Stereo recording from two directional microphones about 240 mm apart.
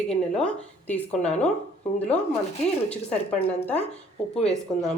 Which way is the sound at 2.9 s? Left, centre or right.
Centre.